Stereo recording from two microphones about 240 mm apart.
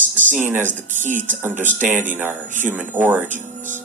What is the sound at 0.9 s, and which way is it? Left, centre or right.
Speech, right.